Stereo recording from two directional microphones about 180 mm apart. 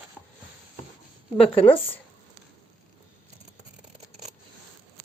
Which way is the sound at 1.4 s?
30° left (ahead or behind).